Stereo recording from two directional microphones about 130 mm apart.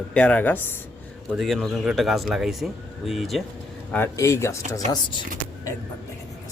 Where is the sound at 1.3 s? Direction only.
Centre (ahead or behind).